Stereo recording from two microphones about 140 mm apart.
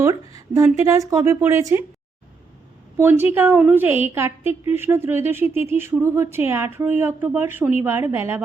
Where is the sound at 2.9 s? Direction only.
15° right (ahead or behind).